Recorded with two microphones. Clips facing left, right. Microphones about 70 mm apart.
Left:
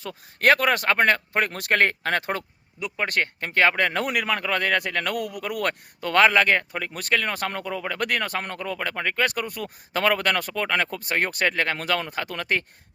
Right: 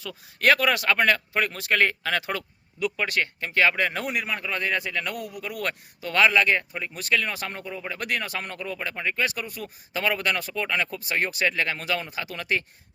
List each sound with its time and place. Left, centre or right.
0.0 s speech: left